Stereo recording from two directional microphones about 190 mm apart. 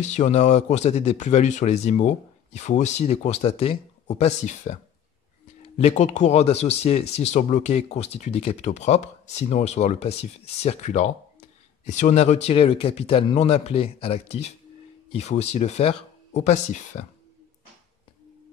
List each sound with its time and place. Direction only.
0.0 s speech: 40° left (ahead or behind)